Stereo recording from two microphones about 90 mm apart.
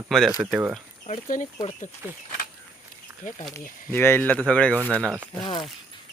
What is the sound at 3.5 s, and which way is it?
Speech, 25° left (ahead or behind).